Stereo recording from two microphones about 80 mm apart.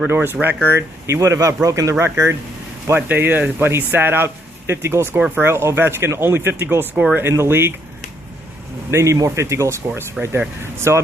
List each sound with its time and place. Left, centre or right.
0.1 s speech: right
3.1 s speech: right
8.9 s speech: right